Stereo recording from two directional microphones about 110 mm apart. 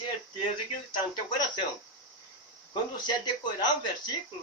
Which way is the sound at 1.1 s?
40° left (ahead or behind).